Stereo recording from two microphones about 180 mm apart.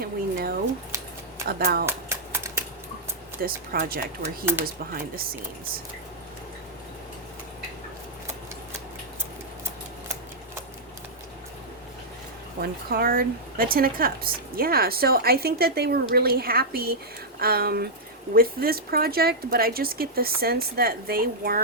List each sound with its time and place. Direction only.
0.0 s speech: 55° right (ahead or behind)
1.9 s a sound: 15° right (ahead or behind)
3.4 s speech: 55° right (ahead or behind)
12.6 s speech: 60° right (ahead or behind)